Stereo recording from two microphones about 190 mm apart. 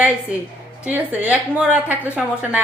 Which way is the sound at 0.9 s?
10° right (ahead or behind).